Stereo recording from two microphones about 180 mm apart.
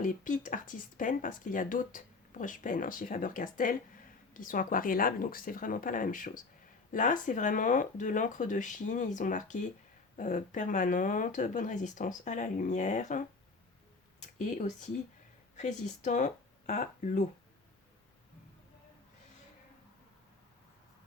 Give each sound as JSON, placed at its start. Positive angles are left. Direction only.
{"t": 0.0, "sound": "speech", "side_deg": 45}
{"t": 14.3, "sound": "speech", "side_deg": 40}